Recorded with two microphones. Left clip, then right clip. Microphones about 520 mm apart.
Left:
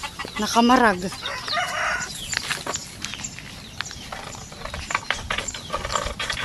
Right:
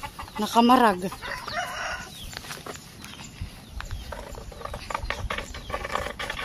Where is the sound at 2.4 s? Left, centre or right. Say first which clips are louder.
Left 12 dB; right.